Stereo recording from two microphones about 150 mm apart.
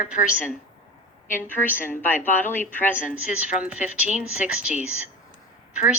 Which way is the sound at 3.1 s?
10° right (ahead or behind).